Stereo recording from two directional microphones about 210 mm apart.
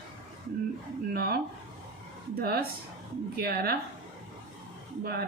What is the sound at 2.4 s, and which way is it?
Speech, 45° right (ahead or behind).